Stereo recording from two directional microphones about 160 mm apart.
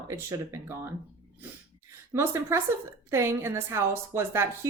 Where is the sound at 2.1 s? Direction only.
15° right (ahead or behind).